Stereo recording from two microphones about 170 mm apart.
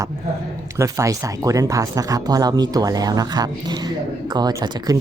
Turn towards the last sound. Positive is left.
turn(degrees=-25)  # may be behind; listen again after turning